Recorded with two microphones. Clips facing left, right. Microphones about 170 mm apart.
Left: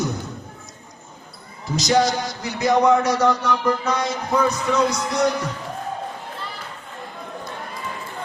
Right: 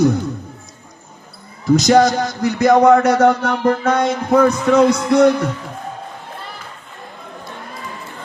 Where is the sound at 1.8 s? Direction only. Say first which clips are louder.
Right 5 dB; 50° right (ahead or behind).